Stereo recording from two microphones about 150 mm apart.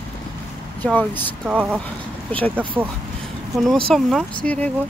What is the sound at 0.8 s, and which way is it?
Speech, 10° left (ahead or behind).